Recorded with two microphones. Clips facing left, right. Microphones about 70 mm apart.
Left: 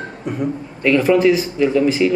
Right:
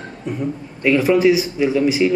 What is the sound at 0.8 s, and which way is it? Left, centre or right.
Speech, centre.